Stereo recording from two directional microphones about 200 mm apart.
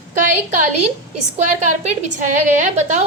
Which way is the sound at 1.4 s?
35° right (ahead or behind).